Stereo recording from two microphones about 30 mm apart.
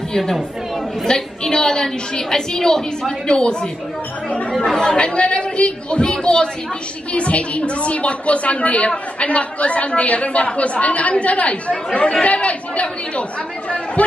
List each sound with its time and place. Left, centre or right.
1.0 s a woman's voice: left
4.3 s chatter: left
4.6 s a woman's voice: centre
4.8 s a man's voice: left
7.1 s a woman's voice: left